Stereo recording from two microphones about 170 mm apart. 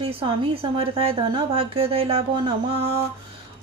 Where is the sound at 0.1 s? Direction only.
35° right (ahead or behind).